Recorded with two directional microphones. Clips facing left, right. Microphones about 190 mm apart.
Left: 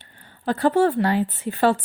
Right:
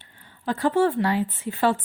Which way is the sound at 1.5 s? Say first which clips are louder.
Left 3 dB; 65° left (ahead or behind).